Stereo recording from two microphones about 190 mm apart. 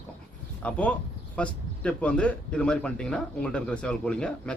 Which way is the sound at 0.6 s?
5° left (ahead or behind).